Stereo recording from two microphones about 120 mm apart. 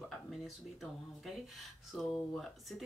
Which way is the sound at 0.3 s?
Centre (ahead or behind).